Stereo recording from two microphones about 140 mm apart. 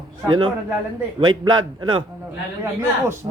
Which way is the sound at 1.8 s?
30° right (ahead or behind).